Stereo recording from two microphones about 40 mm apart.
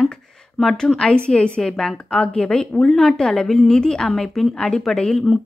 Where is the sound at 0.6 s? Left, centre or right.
Centre.